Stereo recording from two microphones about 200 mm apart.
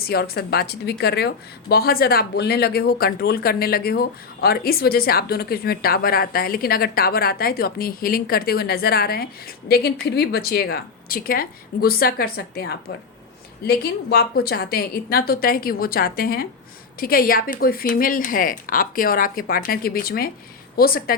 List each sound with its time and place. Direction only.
0.0 s speech: 50° left (ahead or behind)